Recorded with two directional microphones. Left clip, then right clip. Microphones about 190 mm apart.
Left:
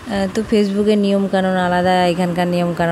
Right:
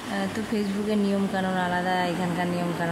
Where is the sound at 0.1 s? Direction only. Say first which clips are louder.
Left 12 dB; 35° left (ahead or behind).